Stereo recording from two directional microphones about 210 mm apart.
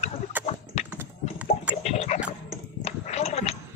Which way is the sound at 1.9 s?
30° left (ahead or behind).